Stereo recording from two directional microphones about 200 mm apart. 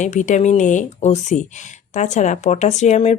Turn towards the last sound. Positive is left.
turn(degrees=35)  # may be behind; listen again after turning